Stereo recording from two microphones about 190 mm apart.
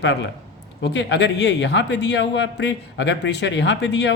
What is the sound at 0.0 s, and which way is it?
A man's voice, 65° left (ahead or behind).